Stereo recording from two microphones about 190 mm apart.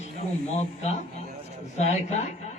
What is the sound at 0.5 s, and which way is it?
A man's voice, 35° left (ahead or behind).